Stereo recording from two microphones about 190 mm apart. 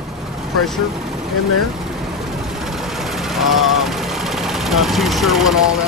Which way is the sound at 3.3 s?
Centre (ahead or behind).